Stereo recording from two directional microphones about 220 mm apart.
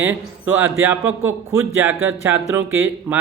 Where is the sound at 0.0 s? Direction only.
10° right (ahead or behind).